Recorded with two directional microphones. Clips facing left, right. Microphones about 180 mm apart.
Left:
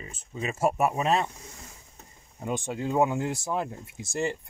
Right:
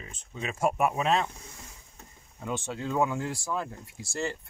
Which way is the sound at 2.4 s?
15° left (ahead or behind).